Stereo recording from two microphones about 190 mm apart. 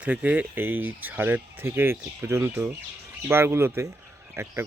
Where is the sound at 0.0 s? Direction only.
5° right (ahead or behind).